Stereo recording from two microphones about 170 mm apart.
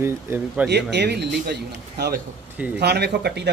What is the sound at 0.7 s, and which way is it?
A man's voice, 90° right.